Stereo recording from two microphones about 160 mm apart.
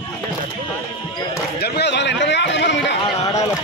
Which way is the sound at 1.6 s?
90° left.